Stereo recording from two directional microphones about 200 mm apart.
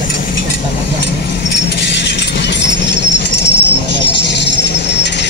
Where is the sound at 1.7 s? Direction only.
60° left (ahead or behind).